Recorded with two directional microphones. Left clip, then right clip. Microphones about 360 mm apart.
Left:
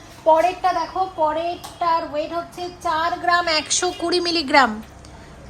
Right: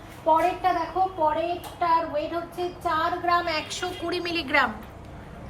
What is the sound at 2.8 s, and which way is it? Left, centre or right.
A woman's voice, left.